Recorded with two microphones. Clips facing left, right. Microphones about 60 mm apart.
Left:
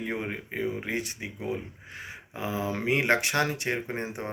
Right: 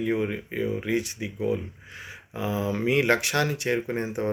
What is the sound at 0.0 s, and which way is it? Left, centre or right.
Speech, left.